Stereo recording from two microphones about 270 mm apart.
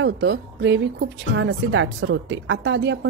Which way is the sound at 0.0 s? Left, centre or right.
Right.